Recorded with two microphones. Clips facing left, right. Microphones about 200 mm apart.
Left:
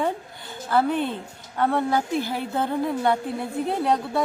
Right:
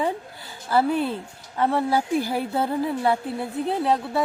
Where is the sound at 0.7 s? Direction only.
5° right (ahead or behind).